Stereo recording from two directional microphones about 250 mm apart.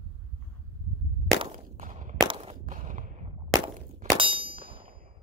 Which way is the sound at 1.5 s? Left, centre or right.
Right.